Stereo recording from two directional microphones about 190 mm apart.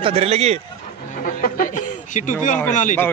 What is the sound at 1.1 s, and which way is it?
Speech, 45° left (ahead or behind).